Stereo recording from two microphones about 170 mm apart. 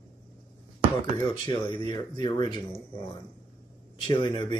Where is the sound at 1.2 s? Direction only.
25° left (ahead or behind).